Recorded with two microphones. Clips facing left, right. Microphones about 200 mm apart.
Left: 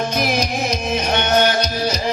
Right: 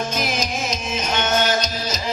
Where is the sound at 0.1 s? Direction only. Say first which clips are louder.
Left 4 dB; 60° left (ahead or behind).